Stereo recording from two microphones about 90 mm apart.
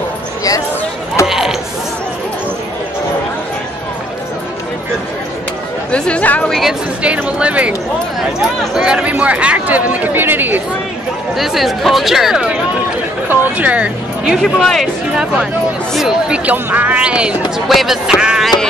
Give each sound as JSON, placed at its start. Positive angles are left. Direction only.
{"t": 1.2, "sound": "creak", "side_deg": -5}
{"t": 5.9, "sound": "speech", "side_deg": 10}
{"t": 7.2, "sound": "speech", "side_deg": -15}
{"t": 8.7, "sound": "speech", "side_deg": -10}
{"t": 11.3, "sound": "speech", "side_deg": 0}
{"t": 13.3, "sound": "speech", "side_deg": -15}
{"t": 16.4, "sound": "speech", "side_deg": -20}